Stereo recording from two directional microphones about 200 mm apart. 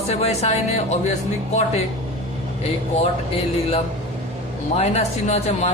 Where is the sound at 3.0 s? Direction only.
30° left (ahead or behind).